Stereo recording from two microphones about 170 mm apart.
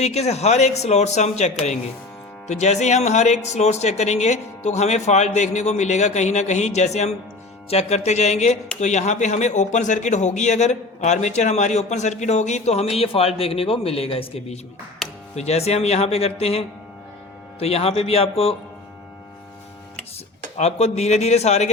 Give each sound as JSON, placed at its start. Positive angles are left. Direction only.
{"t": 0.0, "sound": "speech", "side_deg": 40}
{"t": 15.0, "sound": "music", "side_deg": 0}
{"t": 15.4, "sound": "speech", "side_deg": 40}
{"t": 20.6, "sound": "speech", "side_deg": 40}